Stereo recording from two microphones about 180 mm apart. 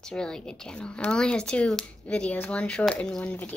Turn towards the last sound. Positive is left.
turn(degrees=10)  # may be behind; listen again after turning